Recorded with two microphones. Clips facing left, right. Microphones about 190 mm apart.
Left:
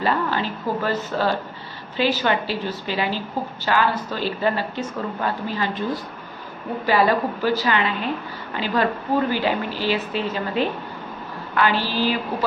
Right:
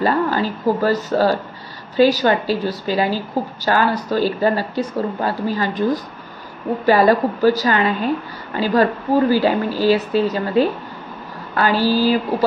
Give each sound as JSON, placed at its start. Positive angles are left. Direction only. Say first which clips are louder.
{"t": 0.0, "sound": "speech", "louder": "right 5 dB", "side_deg": -40}
{"t": 6.9, "sound": "a woman's voice", "louder": "right 5 dB", "side_deg": -40}